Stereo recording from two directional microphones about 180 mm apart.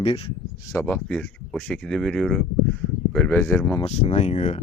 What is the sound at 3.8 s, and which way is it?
Speech, 35° left (ahead or behind).